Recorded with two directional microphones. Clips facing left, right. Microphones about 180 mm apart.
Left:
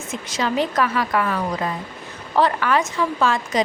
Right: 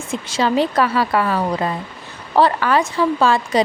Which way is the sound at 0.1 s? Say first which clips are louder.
Right 5 dB; 30° right (ahead or behind).